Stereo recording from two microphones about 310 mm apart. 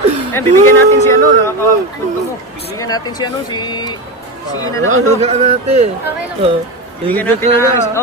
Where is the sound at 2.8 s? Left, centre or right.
Centre.